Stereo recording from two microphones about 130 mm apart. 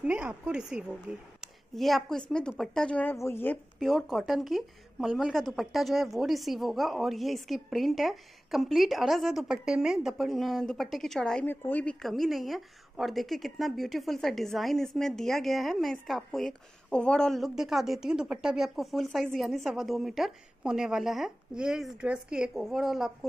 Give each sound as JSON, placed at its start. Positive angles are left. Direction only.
{"t": 0.0, "sound": "speech", "side_deg": -10}
{"t": 1.4, "sound": "a sound", "side_deg": 0}
{"t": 2.5, "sound": "a woman's voice", "side_deg": 5}
{"t": 3.8, "sound": "a woman's voice", "side_deg": 0}